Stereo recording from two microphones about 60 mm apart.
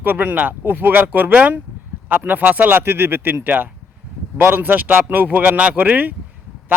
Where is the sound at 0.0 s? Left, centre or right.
Right.